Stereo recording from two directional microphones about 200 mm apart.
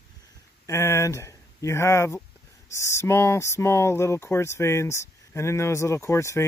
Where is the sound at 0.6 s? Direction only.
15° left (ahead or behind).